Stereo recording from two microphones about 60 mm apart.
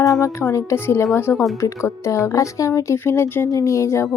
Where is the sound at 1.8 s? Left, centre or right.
Left.